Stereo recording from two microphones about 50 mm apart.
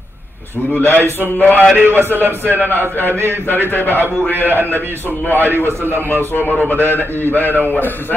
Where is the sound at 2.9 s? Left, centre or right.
Left.